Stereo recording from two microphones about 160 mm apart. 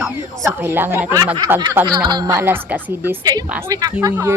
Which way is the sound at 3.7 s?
25° right (ahead or behind).